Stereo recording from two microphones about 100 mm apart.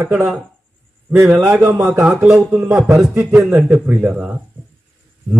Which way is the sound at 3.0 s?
Centre (ahead or behind).